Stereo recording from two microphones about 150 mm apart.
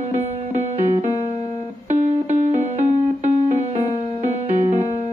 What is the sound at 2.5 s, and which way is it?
Music, 50° right (ahead or behind).